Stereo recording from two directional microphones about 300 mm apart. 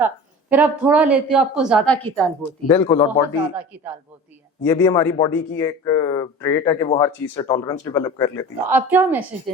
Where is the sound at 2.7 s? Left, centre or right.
Centre.